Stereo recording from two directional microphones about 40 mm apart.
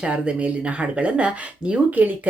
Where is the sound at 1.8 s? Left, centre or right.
Right.